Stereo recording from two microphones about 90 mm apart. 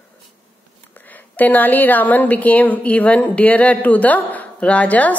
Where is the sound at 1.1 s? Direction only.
20° left (ahead or behind).